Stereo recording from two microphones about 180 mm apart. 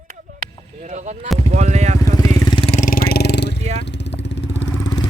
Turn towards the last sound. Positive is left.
turn(degrees=20)  # may be behind; listen again after turning